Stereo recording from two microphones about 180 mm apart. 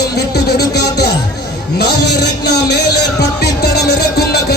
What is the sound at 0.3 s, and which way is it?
Music, 65° left (ahead or behind).